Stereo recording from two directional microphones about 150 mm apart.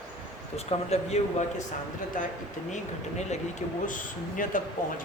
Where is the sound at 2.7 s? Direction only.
50° left (ahead or behind).